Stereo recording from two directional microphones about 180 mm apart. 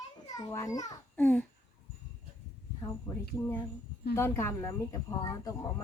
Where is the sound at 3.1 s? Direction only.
20° left (ahead or behind).